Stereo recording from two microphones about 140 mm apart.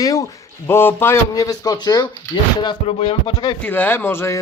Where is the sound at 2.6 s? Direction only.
35° left (ahead or behind).